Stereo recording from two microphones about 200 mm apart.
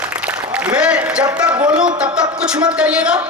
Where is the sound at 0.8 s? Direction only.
5° right (ahead or behind).